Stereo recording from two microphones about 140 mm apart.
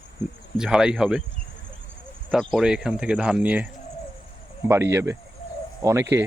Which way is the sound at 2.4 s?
Centre (ahead or behind).